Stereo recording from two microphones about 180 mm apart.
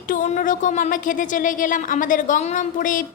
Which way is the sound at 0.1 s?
40° left (ahead or behind).